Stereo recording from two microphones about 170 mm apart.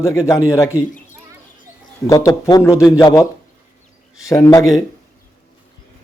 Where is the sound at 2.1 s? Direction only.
20° left (ahead or behind).